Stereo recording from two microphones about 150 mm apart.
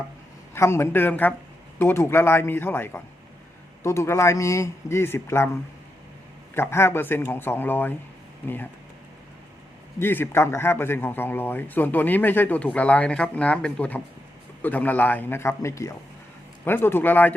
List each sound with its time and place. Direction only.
0.5 s a man's voice: 20° left (ahead or behind)
6.5 s speech: 15° left (ahead or behind)
10.0 s speech: 15° left (ahead or behind)